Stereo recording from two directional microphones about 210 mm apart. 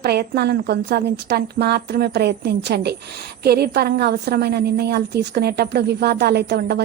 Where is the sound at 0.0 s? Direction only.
50° right (ahead or behind).